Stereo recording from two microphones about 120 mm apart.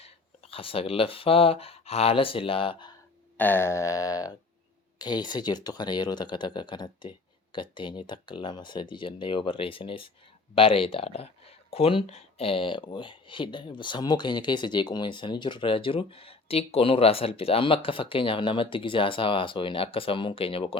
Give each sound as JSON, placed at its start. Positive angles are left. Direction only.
{"t": 0.0, "sound": "speech", "side_deg": 50}
{"t": 3.3, "sound": "a sound", "side_deg": 15}
{"t": 4.9, "sound": "speech", "side_deg": 35}